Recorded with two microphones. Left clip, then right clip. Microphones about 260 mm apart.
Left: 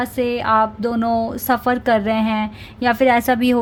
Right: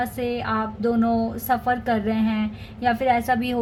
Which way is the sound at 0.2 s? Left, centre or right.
Left.